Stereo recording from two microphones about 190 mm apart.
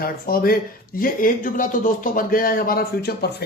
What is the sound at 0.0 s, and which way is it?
Speech, 50° left (ahead or behind).